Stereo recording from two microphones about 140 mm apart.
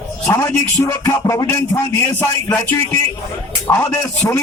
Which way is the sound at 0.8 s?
20° left (ahead or behind).